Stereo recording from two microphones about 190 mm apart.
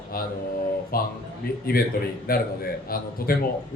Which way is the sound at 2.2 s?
50° left (ahead or behind).